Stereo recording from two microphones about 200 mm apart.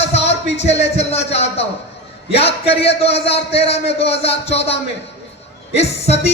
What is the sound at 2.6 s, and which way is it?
Speech, 30° left (ahead or behind).